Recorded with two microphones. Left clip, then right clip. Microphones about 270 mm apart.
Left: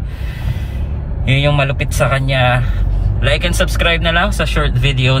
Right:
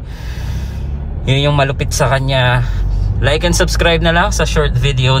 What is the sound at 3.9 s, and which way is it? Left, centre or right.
Speech, centre.